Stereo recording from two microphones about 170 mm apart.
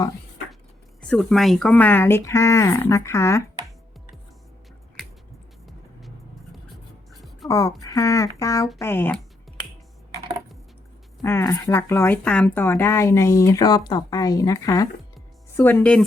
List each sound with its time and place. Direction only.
1.0 s speech: 5° left (ahead or behind)
7.1 s writing: centre (ahead or behind)
7.4 s a sound: 20° left (ahead or behind)
7.8 s speech: 20° left (ahead or behind)
11.2 s speech: 20° left (ahead or behind)